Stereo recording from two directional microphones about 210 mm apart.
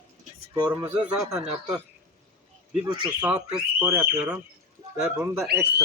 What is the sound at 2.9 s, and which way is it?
Speech, 20° right (ahead or behind).